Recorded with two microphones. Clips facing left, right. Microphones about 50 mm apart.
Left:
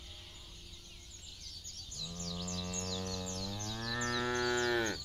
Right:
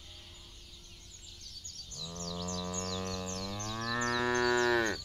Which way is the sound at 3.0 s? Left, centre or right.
Right.